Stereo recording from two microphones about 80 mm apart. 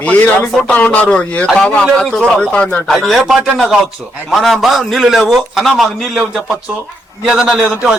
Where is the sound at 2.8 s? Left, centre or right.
Centre.